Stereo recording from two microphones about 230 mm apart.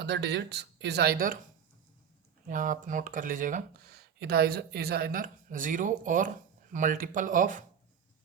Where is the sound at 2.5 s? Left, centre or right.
Right.